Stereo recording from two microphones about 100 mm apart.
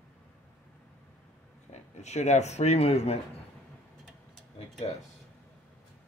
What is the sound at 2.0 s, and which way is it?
Speech, 90° left.